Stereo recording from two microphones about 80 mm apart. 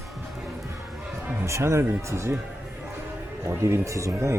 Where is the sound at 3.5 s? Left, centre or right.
Right.